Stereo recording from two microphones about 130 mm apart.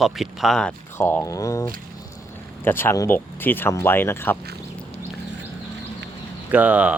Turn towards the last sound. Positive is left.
turn(degrees=-10)  # may be behind; listen again after turning